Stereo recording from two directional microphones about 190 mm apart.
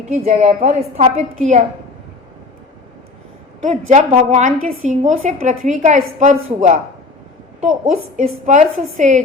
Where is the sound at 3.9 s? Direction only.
35° right (ahead or behind).